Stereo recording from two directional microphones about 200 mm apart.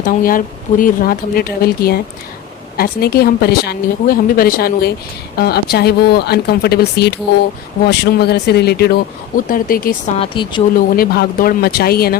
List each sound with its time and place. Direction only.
0.0 s a woman's voice: 45° left (ahead or behind)
10.2 s speech: 25° left (ahead or behind)
10.9 s a woman's voice: 50° left (ahead or behind)